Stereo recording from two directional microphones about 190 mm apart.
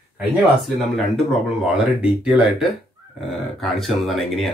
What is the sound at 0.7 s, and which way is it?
Speech, centre (ahead or behind).